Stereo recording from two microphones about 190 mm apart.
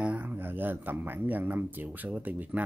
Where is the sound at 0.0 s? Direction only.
10° right (ahead or behind).